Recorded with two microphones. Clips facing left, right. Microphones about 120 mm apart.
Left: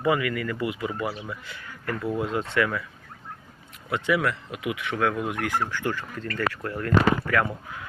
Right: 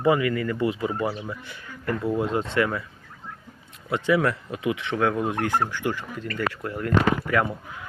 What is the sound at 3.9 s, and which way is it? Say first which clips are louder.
Speech: right 3 dB; 30° right (ahead or behind).